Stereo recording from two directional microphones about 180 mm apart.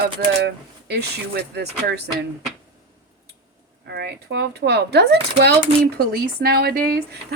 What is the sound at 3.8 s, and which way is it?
Speech, 65° right (ahead or behind).